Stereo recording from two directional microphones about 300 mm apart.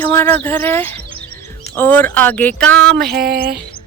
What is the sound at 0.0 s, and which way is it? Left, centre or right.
Speech, centre.